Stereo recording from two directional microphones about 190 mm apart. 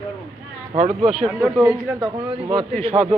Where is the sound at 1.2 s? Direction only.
5° right (ahead or behind).